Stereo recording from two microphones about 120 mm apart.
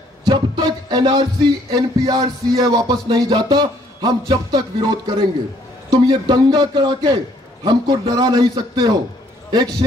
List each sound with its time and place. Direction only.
0.2 s music: 35° right (ahead or behind)
3.3 s a man's voice: 40° right (ahead or behind)